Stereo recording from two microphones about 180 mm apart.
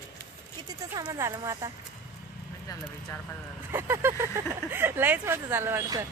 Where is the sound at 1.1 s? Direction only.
20° right (ahead or behind).